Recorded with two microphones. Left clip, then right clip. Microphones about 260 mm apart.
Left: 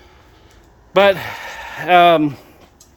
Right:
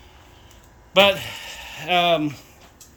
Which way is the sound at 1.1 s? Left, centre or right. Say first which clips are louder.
Left 6 dB; centre.